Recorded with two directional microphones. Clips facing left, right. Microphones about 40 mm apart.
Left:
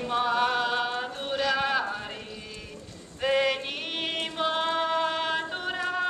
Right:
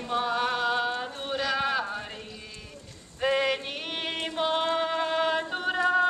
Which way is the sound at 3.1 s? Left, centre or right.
Centre.